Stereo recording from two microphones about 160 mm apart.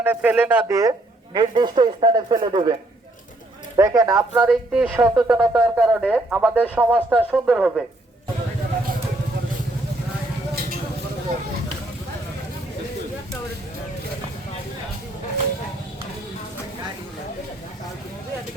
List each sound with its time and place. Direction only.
0.0 s speech: 10° right (ahead or behind)
0.7 s speech: 20° right (ahead or behind)
3.8 s speech: 20° right (ahead or behind)
4.4 s speech: 5° right (ahead or behind)